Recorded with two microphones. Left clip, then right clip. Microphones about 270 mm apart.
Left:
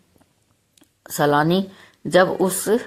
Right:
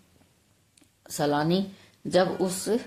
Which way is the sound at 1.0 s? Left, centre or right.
Left.